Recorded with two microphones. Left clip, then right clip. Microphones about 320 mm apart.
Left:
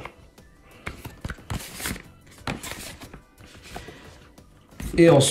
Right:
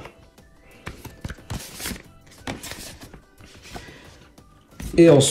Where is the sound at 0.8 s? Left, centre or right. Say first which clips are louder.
Left 1 dB; centre.